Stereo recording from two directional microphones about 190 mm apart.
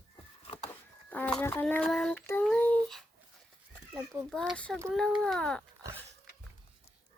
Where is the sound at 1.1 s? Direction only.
5° left (ahead or behind).